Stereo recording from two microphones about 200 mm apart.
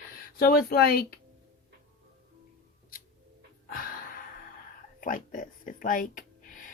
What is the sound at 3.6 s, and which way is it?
Gasp, 45° left (ahead or behind).